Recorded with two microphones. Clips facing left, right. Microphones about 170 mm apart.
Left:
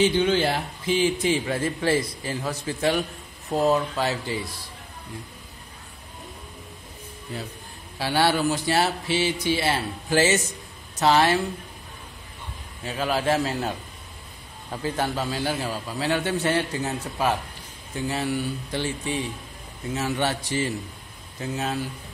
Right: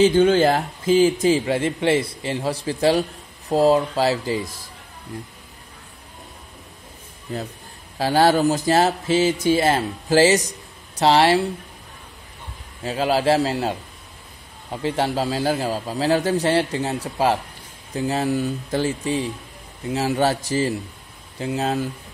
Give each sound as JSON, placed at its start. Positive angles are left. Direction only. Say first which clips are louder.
{"t": 0.0, "sound": "speech", "louder": "right 6 dB", "side_deg": -45}
{"t": 1.5, "sound": "a man's voice", "louder": "right 4 dB", "side_deg": -25}
{"t": 8.0, "sound": "a man's voice", "louder": "right 5 dB", "side_deg": -40}
{"t": 12.8, "sound": "a man's voice", "louder": "right 5 dB", "side_deg": -35}
{"t": 21.5, "sound": "a man's voice", "louder": "right 5 dB", "side_deg": -35}